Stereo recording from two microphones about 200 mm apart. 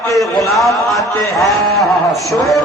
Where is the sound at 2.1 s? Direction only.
15° left (ahead or behind).